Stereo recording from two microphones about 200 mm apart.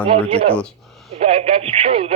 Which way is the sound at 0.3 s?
30° right (ahead or behind).